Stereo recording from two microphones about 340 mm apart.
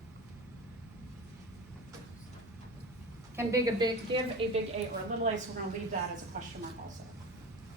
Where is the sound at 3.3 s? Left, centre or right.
Centre.